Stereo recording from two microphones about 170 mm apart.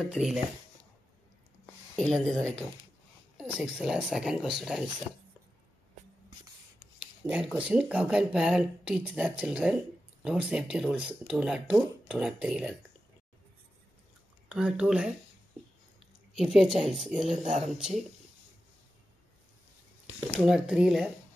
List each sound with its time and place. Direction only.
0.0 s speech: centre (ahead or behind)
2.0 s speech: centre (ahead or behind)
7.2 s speech: 5° right (ahead or behind)
14.5 s speech: 5° right (ahead or behind)
16.3 s speech: centre (ahead or behind)
17.3 s speech: 45° right (ahead or behind)
17.7 s speech: 5° right (ahead or behind)
20.3 s speech: 5° right (ahead or behind)